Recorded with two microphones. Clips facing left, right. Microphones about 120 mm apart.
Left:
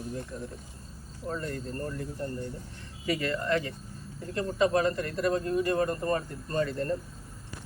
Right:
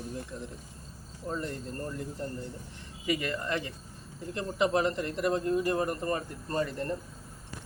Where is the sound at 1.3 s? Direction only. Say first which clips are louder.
Left 1 dB; 20° right (ahead or behind).